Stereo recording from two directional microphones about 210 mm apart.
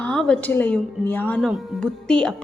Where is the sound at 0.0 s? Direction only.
5° left (ahead or behind).